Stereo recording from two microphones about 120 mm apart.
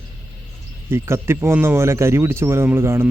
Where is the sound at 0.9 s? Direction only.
20° right (ahead or behind).